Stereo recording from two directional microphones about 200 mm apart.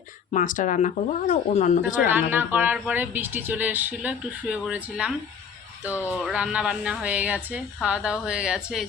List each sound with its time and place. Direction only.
0.3 s speech: 40° left (ahead or behind)
2.0 s speech: 10° right (ahead or behind)
6.1 s a woman's voice: 5° right (ahead or behind)